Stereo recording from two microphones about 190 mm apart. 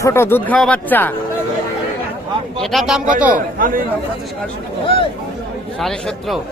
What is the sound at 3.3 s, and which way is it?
Speech, 45° right (ahead or behind).